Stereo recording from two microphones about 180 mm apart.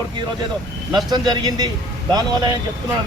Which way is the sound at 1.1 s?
20° right (ahead or behind).